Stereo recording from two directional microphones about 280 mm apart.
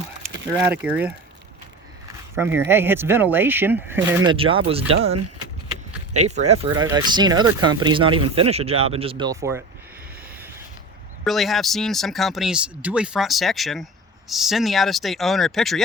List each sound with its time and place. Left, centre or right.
0.5 s speech: centre
2.3 s speech: centre
6.1 s speech: right
11.2 s speech: centre